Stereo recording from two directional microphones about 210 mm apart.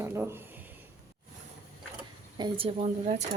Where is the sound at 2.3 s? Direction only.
25° right (ahead or behind).